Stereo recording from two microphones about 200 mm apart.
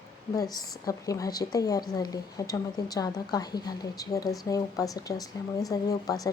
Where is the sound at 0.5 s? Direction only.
15° left (ahead or behind).